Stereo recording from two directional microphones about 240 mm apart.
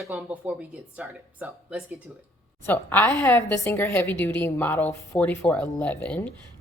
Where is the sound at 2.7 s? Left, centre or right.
Centre.